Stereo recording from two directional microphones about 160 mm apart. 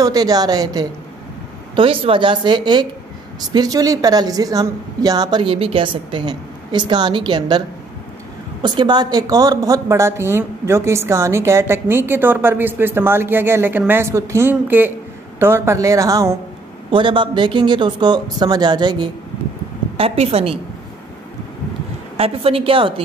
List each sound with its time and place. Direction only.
0.0 s a woman's voice: 25° right (ahead or behind)
8.6 s a woman's voice: 30° right (ahead or behind)
16.9 s a woman's voice: 30° right (ahead or behind)
20.0 s a woman's voice: 40° right (ahead or behind)
22.1 s a woman's voice: 35° right (ahead or behind)